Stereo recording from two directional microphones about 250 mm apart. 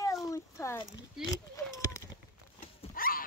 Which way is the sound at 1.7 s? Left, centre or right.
Centre.